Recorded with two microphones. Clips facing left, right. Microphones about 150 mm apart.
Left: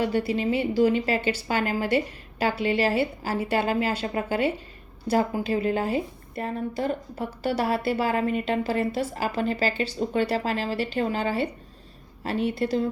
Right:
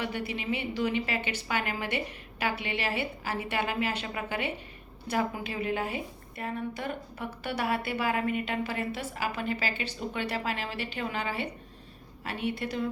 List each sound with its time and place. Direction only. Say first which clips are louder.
0.3 s a woman's voice: left 9 dB; 35° left (ahead or behind)